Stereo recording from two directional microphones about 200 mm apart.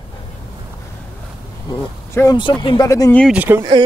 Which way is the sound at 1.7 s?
20° left (ahead or behind).